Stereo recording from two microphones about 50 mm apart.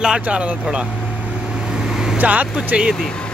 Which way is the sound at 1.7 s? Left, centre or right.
Centre.